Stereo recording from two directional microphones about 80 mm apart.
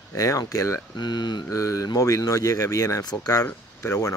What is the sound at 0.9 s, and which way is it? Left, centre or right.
Speech, left.